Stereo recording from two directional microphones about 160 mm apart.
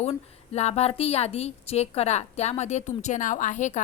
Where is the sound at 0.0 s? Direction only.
45° left (ahead or behind).